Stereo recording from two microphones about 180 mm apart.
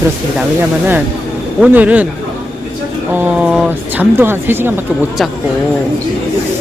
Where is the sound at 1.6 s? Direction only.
10° right (ahead or behind).